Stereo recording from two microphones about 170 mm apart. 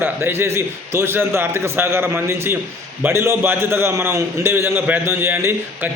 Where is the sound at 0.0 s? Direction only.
15° right (ahead or behind).